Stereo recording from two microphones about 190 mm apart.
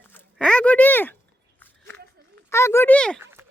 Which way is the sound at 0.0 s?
10° left (ahead or behind).